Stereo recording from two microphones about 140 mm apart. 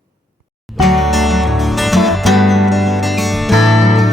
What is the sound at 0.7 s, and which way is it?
Music, centre (ahead or behind).